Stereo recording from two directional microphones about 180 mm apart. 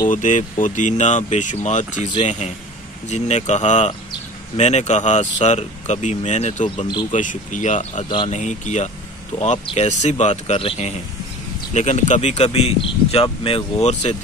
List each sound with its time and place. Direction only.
0.1 s speech: 45° left (ahead or behind)